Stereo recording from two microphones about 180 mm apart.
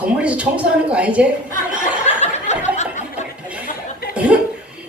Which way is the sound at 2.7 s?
40° left (ahead or behind).